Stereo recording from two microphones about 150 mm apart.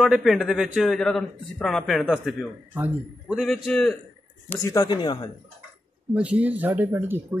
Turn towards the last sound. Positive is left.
turn(degrees=-15)  # may be behind; listen again after turning